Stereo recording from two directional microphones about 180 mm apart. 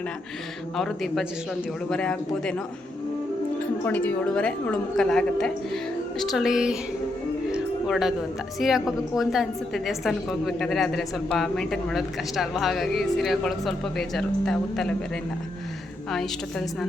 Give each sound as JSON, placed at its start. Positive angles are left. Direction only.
{"t": 0.8, "sound": "a woman's voice", "side_deg": 0}
{"t": 3.8, "sound": "a woman's voice", "side_deg": 10}
{"t": 7.5, "sound": "music", "side_deg": 0}
{"t": 8.5, "sound": "a woman's voice", "side_deg": 0}